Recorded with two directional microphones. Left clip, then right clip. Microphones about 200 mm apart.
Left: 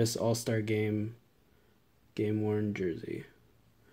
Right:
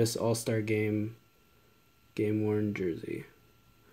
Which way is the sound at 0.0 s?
Centre (ahead or behind).